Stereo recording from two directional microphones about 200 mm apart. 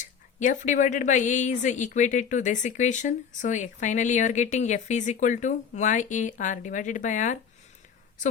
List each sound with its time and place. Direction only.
0.0 s speech: 40° left (ahead or behind)